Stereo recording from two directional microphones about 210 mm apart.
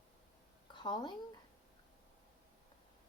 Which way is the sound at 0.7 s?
20° left (ahead or behind).